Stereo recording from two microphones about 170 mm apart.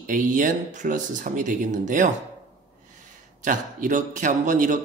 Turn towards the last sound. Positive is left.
turn(degrees=-50)  # may be behind; listen again after turning